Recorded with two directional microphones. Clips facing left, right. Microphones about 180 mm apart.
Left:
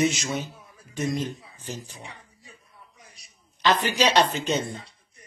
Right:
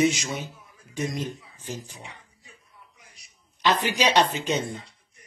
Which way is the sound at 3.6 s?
15° right (ahead or behind).